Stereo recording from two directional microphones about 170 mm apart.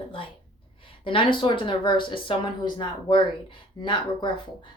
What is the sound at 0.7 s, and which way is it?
Speech, 30° left (ahead or behind).